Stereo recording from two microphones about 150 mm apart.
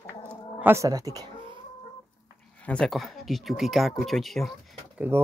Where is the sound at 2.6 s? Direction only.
5° left (ahead or behind).